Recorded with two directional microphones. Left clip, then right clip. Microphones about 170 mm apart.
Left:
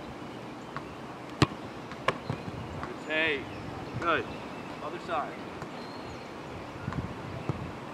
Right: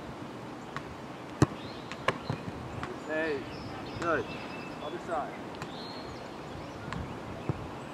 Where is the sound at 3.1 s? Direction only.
25° left (ahead or behind).